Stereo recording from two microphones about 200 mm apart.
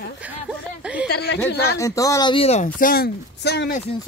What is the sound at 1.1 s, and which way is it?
Speech, 55° left (ahead or behind).